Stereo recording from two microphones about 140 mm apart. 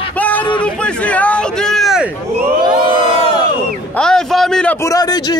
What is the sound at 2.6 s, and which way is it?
Crowd, 35° right (ahead or behind).